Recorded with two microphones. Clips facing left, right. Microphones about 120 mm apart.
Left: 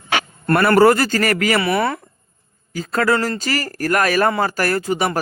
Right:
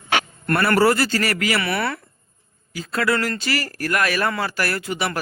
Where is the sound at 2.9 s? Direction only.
40° left (ahead or behind).